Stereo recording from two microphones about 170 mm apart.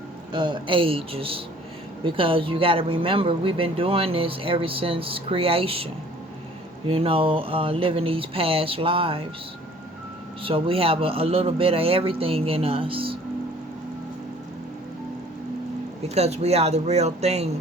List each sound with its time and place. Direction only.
0.3 s speech: 25° right (ahead or behind)
10.4 s speech: 35° right (ahead or behind)
16.0 s speech: 40° right (ahead or behind)